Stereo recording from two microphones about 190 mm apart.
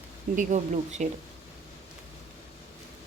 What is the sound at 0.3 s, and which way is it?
Speech, 35° right (ahead or behind).